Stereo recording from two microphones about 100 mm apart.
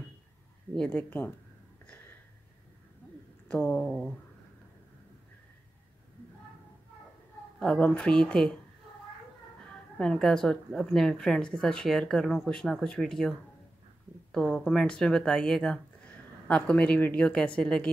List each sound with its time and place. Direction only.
0.7 s speech: 15° left (ahead or behind)
1.9 s a sound: 15° left (ahead or behind)
3.4 s speech: 10° left (ahead or behind)
7.5 s speech: 10° left (ahead or behind)
9.9 s a woman's voice: 5° left (ahead or behind)
14.3 s speech: centre (ahead or behind)